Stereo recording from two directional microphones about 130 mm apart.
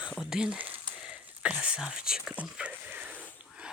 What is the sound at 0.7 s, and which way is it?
Whispering, 10° right (ahead or behind).